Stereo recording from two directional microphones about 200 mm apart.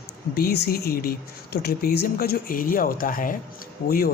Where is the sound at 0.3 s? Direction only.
50° left (ahead or behind).